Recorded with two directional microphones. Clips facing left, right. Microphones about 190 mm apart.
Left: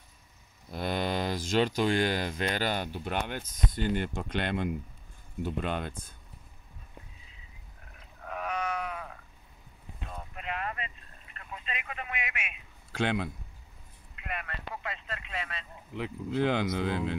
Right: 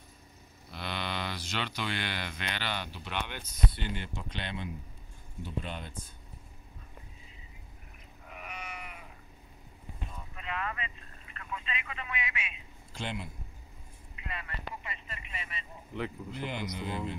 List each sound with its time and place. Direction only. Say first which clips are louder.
0.7 s speech: left 7 dB; 45° left (ahead or behind)
8.2 s sheep: left 11 dB; 90° left
10.0 s a sound: left 4 dB; 55° left (ahead or behind)
14.2 s vehicle: left 3 dB; 65° left (ahead or behind); by 15.6 s 90° left
16.3 s speech: left 9 dB; 90° left